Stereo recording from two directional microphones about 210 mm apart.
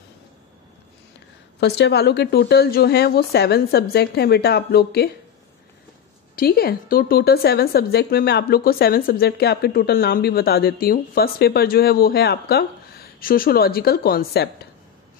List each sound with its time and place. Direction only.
1.6 s a woman's voice: 55° left (ahead or behind)
6.3 s a woman's voice: 45° left (ahead or behind)